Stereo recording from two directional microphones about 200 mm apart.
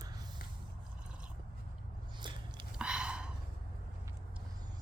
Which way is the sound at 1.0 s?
5° right (ahead or behind).